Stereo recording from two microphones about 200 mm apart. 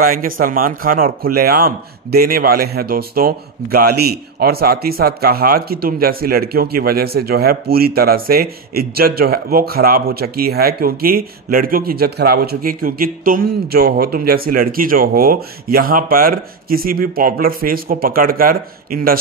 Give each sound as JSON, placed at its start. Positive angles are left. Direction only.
{"t": 0.0, "sound": "speech", "side_deg": -45}